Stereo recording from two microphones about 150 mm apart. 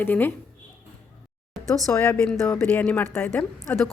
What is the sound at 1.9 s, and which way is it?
A woman's voice, 10° left (ahead or behind).